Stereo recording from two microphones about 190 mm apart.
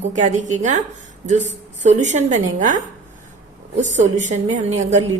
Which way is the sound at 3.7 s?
40° right (ahead or behind).